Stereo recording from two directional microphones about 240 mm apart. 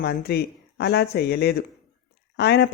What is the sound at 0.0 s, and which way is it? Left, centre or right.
Speech, left.